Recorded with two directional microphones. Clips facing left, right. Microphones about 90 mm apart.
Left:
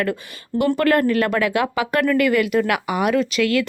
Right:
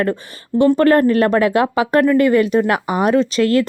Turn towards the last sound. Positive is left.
turn(degrees=-35)  # may be behind; listen again after turning